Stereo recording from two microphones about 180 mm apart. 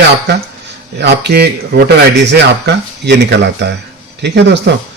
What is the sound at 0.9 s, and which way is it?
Speech, 65° right (ahead or behind).